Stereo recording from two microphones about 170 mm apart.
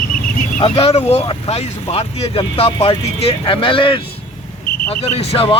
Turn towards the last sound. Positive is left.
turn(degrees=35)  # may be behind; listen again after turning